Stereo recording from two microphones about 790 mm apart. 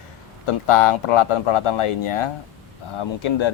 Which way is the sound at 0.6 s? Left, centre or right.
Left.